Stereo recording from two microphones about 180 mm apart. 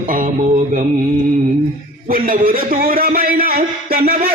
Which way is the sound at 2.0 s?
50° right (ahead or behind).